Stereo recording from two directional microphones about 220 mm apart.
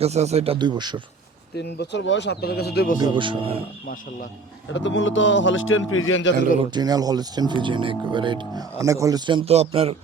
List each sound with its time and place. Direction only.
0.0 s speech: 30° right (ahead or behind)
1.5 s speech: 50° left (ahead or behind)
3.0 s speech: 20° right (ahead or behind)
4.7 s speech: 55° left (ahead or behind)
6.6 s speech: 20° right (ahead or behind)